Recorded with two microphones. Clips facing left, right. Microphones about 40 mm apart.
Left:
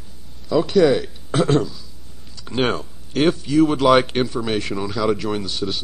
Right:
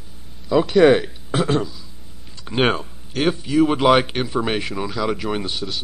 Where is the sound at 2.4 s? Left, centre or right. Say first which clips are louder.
Right 2 dB; right.